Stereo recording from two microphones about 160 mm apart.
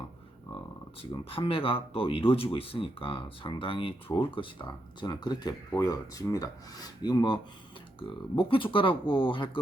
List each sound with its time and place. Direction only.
1.1 s speech: 35° left (ahead or behind)